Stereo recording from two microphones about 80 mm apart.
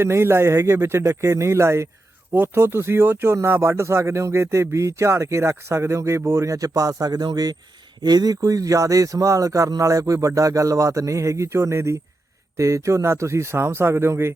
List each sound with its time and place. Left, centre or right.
0.0 s speech: right